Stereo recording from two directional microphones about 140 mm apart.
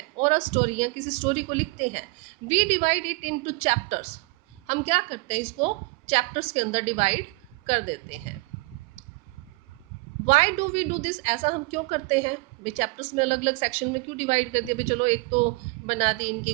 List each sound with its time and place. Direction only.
0.2 s a woman's voice: 50° right (ahead or behind)
10.2 s a woman's voice: 50° right (ahead or behind)